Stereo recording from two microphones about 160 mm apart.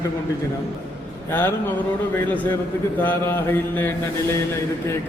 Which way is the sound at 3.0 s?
15° left (ahead or behind).